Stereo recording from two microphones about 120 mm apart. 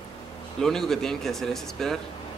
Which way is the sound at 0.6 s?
5° left (ahead or behind).